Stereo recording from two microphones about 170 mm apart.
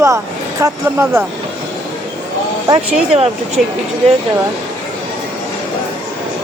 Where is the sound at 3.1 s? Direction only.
35° right (ahead or behind).